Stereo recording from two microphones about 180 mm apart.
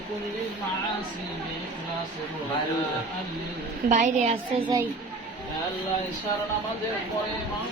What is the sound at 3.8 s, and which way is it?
Speech, 40° right (ahead or behind).